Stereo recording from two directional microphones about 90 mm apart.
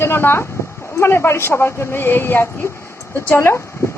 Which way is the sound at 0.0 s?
25° left (ahead or behind).